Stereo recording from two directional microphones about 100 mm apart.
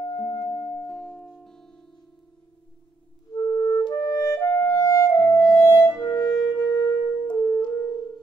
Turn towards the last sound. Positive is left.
turn(degrees=45)  # may be behind; listen again after turning